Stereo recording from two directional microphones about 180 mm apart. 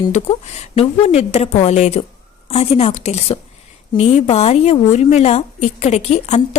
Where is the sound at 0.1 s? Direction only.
35° left (ahead or behind).